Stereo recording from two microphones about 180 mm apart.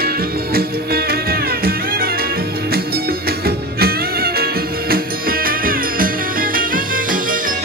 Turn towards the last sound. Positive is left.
turn(degrees=-50)  # may be behind; listen again after turning